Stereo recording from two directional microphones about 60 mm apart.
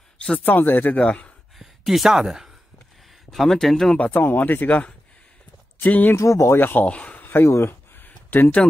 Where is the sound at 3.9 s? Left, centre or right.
Left.